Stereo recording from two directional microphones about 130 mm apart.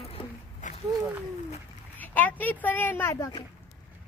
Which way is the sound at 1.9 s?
15° left (ahead or behind).